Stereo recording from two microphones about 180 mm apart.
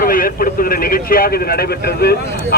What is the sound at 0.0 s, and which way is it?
A man's voice, 50° left (ahead or behind).